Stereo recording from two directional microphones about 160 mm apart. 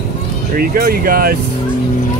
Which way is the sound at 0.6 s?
65° right (ahead or behind).